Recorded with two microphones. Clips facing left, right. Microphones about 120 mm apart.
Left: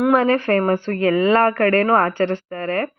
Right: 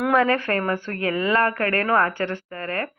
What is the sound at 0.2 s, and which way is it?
A woman's voice, 25° left (ahead or behind).